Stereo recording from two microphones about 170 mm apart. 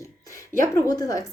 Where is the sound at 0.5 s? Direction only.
15° left (ahead or behind).